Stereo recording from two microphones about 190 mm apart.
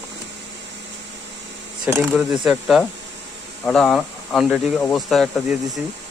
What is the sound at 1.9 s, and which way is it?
Speech, 5° right (ahead or behind).